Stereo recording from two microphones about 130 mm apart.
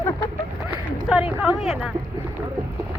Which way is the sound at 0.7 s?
10° right (ahead or behind).